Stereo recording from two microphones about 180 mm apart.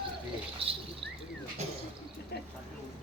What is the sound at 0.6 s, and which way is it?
Rodents, 30° right (ahead or behind).